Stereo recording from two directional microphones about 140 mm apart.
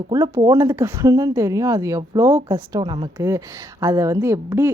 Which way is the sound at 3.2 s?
20° right (ahead or behind).